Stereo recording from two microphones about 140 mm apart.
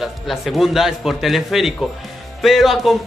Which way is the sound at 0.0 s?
Centre (ahead or behind).